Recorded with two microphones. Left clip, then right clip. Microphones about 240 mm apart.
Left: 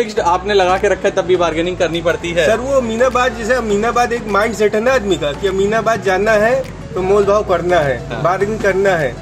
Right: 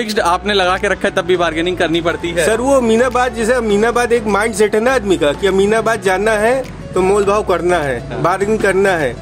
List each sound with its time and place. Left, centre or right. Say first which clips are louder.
0.1 s speech: right 4 dB; right
2.5 s speech: right 3 dB; right